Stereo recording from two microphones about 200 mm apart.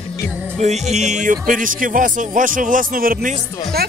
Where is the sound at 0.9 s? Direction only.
35° right (ahead or behind).